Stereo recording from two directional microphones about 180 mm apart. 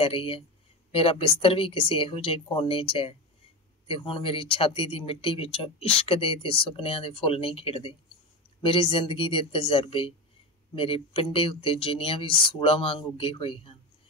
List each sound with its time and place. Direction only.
0.0 s speech: 30° left (ahead or behind)